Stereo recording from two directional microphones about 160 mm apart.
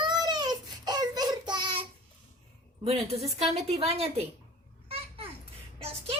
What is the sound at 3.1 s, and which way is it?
A woman's voice, 40° right (ahead or behind).